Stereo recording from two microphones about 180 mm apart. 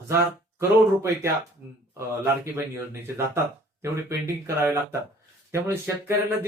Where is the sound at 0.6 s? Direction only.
15° right (ahead or behind).